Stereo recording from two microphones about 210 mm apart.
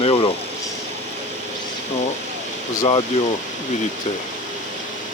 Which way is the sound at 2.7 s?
25° left (ahead or behind).